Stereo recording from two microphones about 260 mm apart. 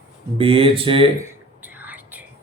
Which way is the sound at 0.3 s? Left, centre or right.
Right.